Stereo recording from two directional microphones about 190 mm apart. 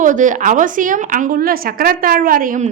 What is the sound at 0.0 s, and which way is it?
A woman's voice, 40° right (ahead or behind).